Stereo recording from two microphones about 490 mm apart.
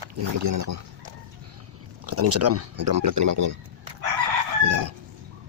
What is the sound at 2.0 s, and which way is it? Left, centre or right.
Speech, right.